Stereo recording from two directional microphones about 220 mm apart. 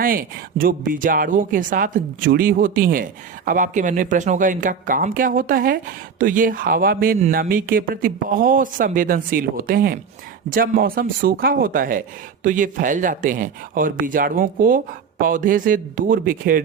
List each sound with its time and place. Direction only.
0.0 s speech: 40° right (ahead or behind)